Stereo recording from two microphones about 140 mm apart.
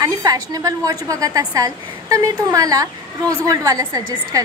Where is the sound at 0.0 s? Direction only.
25° right (ahead or behind).